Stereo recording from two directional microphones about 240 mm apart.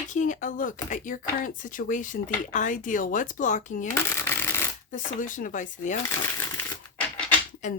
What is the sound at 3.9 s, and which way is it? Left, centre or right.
Shuffling cards, centre.